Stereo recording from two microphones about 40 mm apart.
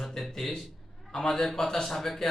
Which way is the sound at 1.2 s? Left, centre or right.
Centre.